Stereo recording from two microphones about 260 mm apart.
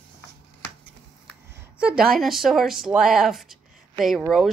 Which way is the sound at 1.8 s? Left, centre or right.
Centre.